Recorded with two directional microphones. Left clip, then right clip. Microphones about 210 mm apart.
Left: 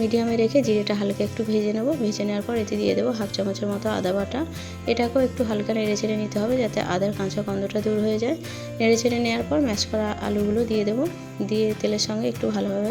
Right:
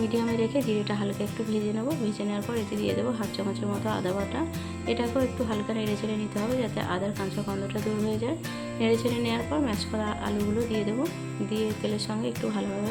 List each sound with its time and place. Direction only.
0.0 s speech: 20° left (ahead or behind)